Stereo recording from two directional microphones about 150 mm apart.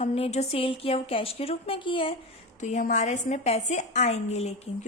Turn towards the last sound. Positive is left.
turn(degrees=45)  # may be behind; listen again after turning